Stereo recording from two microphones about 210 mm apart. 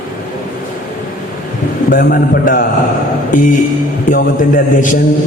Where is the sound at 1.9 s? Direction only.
45° left (ahead or behind).